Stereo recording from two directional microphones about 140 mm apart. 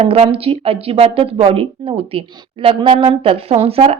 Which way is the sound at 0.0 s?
45° right (ahead or behind).